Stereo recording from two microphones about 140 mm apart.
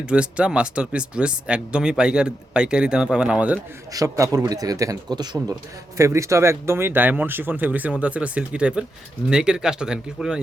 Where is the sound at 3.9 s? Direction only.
20° right (ahead or behind).